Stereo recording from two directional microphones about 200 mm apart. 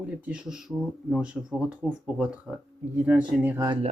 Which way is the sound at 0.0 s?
5° right (ahead or behind).